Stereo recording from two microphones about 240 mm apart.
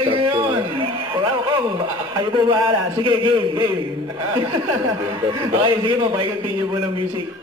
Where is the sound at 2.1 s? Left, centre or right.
Centre.